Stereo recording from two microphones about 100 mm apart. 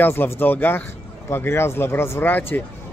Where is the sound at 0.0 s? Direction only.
25° left (ahead or behind).